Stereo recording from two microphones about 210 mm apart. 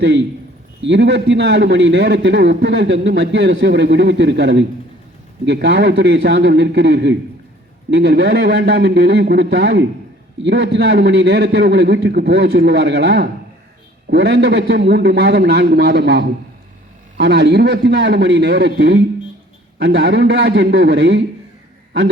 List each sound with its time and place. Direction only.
0.8 s a man's voice: 55° right (ahead or behind)